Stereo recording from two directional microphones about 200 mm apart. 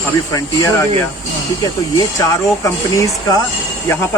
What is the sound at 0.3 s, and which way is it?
Speech, 15° left (ahead or behind).